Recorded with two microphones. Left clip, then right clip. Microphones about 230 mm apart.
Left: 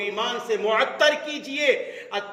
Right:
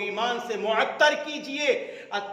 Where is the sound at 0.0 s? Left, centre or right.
Centre.